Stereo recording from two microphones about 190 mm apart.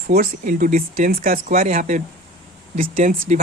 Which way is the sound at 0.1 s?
50° right (ahead or behind).